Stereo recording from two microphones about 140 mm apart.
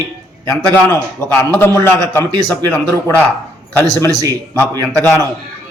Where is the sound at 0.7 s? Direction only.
15° left (ahead or behind).